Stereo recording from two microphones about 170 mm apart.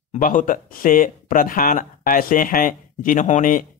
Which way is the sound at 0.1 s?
50° left (ahead or behind).